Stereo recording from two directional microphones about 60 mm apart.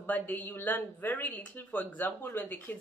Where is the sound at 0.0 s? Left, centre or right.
Left.